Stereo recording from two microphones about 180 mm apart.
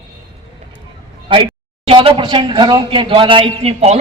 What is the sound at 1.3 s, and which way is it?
A man's voice, 30° right (ahead or behind).